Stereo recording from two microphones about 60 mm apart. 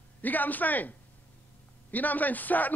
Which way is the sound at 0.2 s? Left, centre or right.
Left.